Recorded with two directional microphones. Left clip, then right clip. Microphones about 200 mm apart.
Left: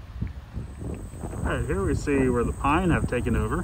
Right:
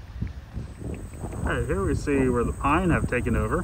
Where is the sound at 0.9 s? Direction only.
35° right (ahead or behind).